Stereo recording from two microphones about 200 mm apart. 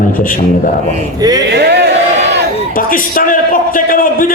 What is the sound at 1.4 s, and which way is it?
Speech, 55° right (ahead or behind).